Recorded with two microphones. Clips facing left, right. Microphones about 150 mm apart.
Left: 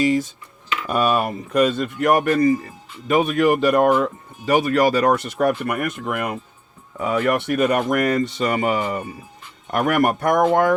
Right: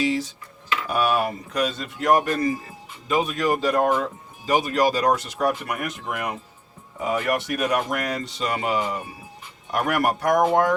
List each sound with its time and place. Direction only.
0.9 s speech: 55° left (ahead or behind)